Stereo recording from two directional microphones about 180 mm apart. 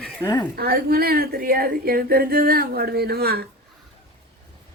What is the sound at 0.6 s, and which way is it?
Speech, 55° right (ahead or behind).